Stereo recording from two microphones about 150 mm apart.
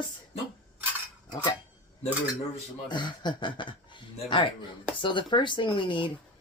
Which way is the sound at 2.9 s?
30° left (ahead or behind).